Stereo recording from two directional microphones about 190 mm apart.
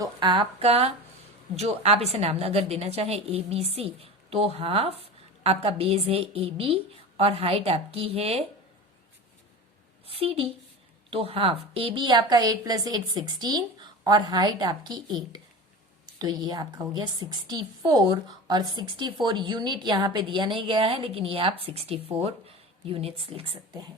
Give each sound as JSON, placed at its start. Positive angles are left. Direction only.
{"t": 0.0, "sound": "a woman's voice", "side_deg": -25}
{"t": 10.1, "sound": "a woman's voice", "side_deg": -30}